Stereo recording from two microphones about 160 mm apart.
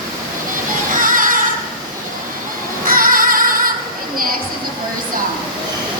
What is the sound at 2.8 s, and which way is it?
Music, 60° right (ahead or behind).